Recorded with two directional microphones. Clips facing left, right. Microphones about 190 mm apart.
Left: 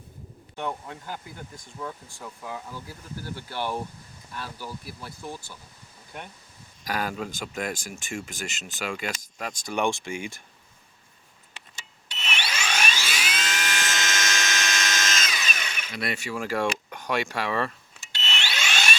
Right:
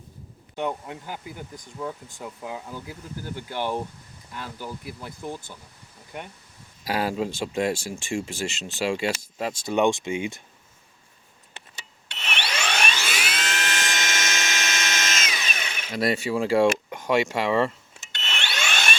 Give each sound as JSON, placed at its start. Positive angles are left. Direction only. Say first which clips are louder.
{"t": 0.5, "sound": "speech", "louder": "right 4 dB", "side_deg": -15}
{"t": 6.8, "sound": "speech", "louder": "right 4 dB", "side_deg": -30}
{"t": 12.0, "sound": "a sound", "louder": "right 1 dB", "side_deg": -60}
{"t": 13.7, "sound": "a sound", "louder": "right 1 dB", "side_deg": -20}
{"t": 15.3, "sound": "tools", "louder": "right 1 dB", "side_deg": -25}
{"t": 15.9, "sound": "speech", "louder": "right 8 dB", "side_deg": -40}
{"t": 16.3, "sound": "speech", "louder": "right 7 dB", "side_deg": -25}
{"t": 18.1, "sound": "wood", "louder": "even", "side_deg": -55}